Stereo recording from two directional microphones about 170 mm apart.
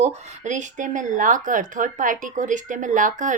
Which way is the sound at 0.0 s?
45° right (ahead or behind).